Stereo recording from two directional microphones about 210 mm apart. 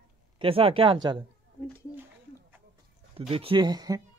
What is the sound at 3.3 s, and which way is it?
Speech, 25° right (ahead or behind).